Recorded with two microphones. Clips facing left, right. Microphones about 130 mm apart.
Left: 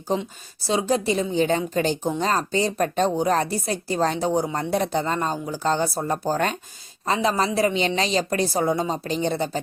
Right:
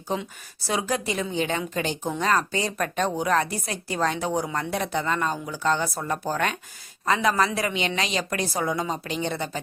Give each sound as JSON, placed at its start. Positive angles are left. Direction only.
{"t": 0.7, "sound": "speech", "side_deg": 30}